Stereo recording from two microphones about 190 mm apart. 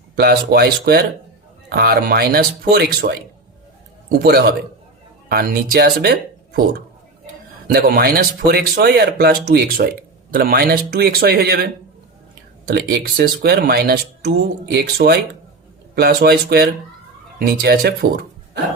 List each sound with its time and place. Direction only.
0.2 s speech: 55° right (ahead or behind)
4.2 s speech: 55° right (ahead or behind)
7.7 s speech: 55° right (ahead or behind)